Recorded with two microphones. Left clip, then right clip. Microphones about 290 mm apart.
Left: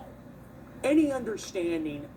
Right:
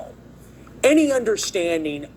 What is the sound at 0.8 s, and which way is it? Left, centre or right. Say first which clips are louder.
Speech: right 9 dB; right.